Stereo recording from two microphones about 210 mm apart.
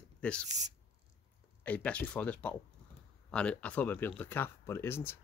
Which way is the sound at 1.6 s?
5° left (ahead or behind).